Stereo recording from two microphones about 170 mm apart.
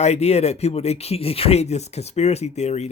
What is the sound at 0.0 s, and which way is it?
Speech, 40° left (ahead or behind).